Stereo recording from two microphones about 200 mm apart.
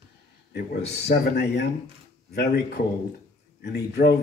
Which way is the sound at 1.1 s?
55° left (ahead or behind).